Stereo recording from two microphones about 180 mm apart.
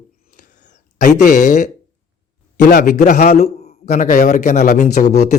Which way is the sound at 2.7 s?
45° left (ahead or behind).